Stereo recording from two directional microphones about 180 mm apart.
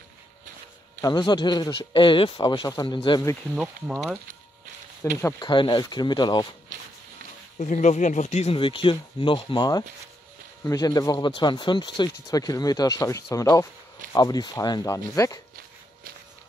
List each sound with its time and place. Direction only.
1.0 s speech: 25° left (ahead or behind)
3.6 s speech: 15° right (ahead or behind)
5.1 s speech: 20° left (ahead or behind)
7.5 s speech: 45° left (ahead or behind); by 15.4 s 20° left (ahead or behind)